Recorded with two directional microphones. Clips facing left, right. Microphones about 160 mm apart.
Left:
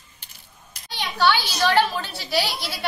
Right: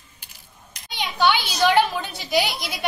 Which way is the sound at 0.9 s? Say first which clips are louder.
Even; 15° right (ahead or behind).